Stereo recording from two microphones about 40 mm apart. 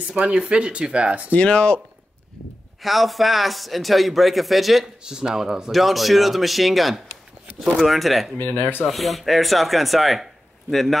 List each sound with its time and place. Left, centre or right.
0.1 s speech: right
1.3 s speech: left
2.8 s a man's voice: centre
5.0 s speech: centre
5.7 s a man's voice: centre
8.4 s speech: left
8.8 s a man's voice: centre